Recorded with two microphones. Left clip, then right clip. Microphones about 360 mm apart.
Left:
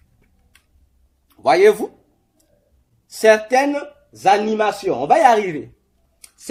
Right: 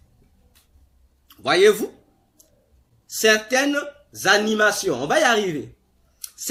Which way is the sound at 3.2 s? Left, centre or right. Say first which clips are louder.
Left 5 dB; centre.